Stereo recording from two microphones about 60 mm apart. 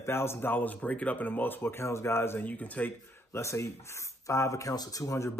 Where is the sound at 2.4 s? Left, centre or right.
Left.